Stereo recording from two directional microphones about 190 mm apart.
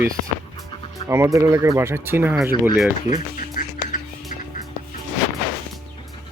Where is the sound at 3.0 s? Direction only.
40° left (ahead or behind).